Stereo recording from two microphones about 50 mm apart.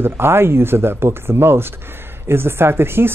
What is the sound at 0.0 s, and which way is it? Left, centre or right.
Speech, right.